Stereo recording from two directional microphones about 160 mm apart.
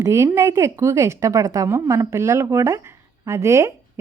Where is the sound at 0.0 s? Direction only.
20° right (ahead or behind).